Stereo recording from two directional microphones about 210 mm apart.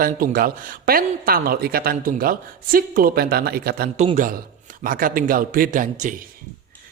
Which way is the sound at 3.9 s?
35° right (ahead or behind).